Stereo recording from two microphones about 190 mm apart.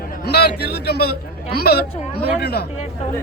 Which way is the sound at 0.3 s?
55° left (ahead or behind).